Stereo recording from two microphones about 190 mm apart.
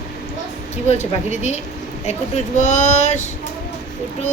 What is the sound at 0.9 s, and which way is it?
Speech, 35° left (ahead or behind).